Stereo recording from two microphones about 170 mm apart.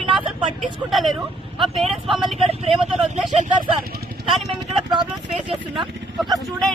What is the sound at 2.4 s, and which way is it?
Speech, 35° right (ahead or behind).